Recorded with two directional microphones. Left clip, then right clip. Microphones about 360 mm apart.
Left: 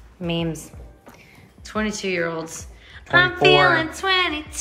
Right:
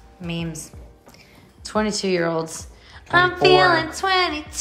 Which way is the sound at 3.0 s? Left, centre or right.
Centre.